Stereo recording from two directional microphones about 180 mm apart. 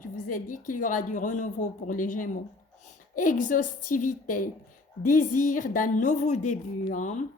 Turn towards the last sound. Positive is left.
turn(degrees=45)  # may be behind; listen again after turning